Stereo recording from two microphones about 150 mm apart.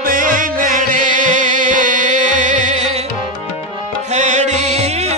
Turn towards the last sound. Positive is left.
turn(degrees=-45)  # may be behind; listen again after turning